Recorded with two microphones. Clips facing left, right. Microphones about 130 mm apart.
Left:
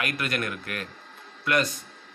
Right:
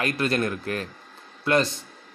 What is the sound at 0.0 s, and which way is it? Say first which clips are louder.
A man's voice: right 5 dB; 30° right (ahead or behind).